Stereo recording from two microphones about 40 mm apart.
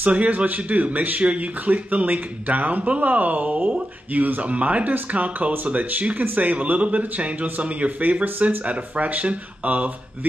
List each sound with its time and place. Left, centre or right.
0.0 s speech: right